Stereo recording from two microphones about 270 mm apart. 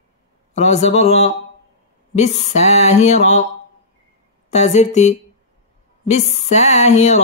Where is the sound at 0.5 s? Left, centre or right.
Left.